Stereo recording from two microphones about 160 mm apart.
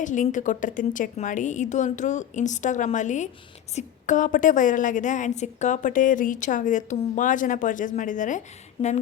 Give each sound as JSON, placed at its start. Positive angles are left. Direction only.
{"t": 0.0, "sound": "a woman's voice", "side_deg": 50}